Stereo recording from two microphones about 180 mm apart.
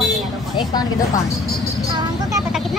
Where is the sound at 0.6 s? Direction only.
20° left (ahead or behind).